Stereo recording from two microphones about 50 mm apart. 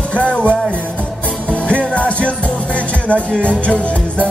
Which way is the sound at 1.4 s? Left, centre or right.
Left.